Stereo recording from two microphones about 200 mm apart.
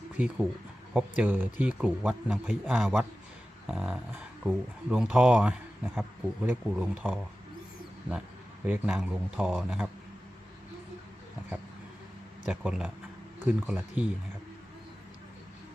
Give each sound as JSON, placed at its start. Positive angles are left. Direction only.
{"t": 0.9, "sound": "speech", "side_deg": -5}
{"t": 8.6, "sound": "speech", "side_deg": -10}
{"t": 12.5, "sound": "speech", "side_deg": -5}